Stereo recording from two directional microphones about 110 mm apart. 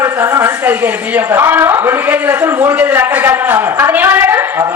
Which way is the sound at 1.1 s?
20° right (ahead or behind).